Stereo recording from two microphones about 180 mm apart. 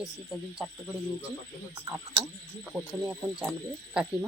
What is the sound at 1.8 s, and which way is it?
Speech, 20° right (ahead or behind).